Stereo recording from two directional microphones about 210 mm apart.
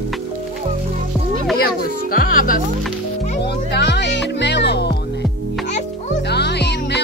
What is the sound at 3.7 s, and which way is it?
Music, 55° left (ahead or behind).